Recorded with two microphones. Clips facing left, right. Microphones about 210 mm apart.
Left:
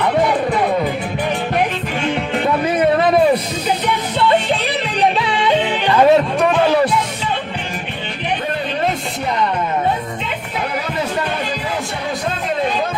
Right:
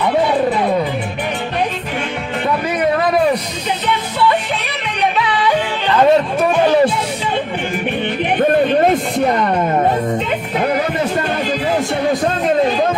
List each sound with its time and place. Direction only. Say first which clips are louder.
5.2 s music: even; 25° left (ahead or behind)
5.9 s music: even; 5° left (ahead or behind)
8.4 s a sound: right 12 dB; 50° right (ahead or behind)